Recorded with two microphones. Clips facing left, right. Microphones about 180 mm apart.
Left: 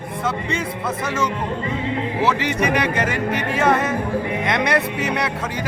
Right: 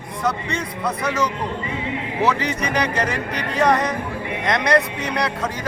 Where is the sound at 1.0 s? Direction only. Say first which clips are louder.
Right 1 dB; 25° left (ahead or behind).